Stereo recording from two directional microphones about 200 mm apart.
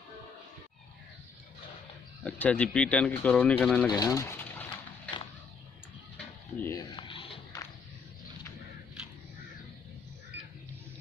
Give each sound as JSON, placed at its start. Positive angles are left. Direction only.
{"t": 2.2, "sound": "speech", "side_deg": 5}
{"t": 3.8, "sound": "speech", "side_deg": 20}
{"t": 6.1, "sound": "stir", "side_deg": 10}
{"t": 6.9, "sound": "a sound", "side_deg": 25}